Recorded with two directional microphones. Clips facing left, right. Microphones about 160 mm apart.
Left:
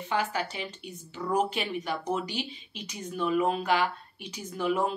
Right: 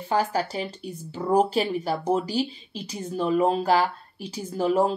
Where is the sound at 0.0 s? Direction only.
35° right (ahead or behind).